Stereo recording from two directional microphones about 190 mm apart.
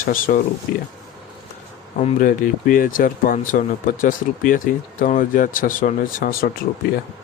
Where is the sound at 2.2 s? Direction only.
45° left (ahead or behind).